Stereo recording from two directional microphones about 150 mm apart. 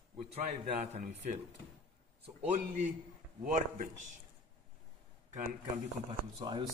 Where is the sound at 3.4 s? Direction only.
60° right (ahead or behind).